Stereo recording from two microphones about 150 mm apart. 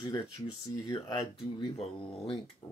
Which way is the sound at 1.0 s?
25° left (ahead or behind).